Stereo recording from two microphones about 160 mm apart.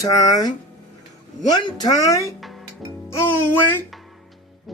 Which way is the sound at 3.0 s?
15° left (ahead or behind).